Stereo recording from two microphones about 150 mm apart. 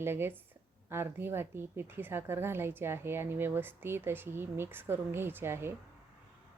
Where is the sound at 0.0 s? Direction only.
15° right (ahead or behind).